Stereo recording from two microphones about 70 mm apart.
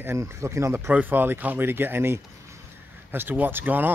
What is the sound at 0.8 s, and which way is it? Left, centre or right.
Speech, right.